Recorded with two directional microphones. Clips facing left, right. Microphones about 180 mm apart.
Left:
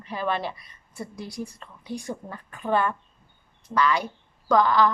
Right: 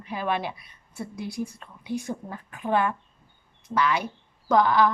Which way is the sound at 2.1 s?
10° right (ahead or behind).